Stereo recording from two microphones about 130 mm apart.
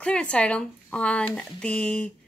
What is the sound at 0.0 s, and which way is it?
A woman's voice, 10° left (ahead or behind).